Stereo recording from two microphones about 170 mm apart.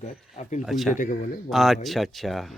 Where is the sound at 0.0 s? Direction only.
45° left (ahead or behind).